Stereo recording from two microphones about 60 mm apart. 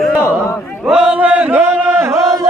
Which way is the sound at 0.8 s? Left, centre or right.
Centre.